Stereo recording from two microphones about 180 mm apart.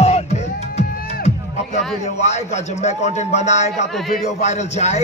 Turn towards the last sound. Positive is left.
turn(degrees=40)  # may be behind; listen again after turning